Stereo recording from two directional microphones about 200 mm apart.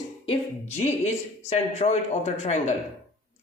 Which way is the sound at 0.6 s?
35° left (ahead or behind).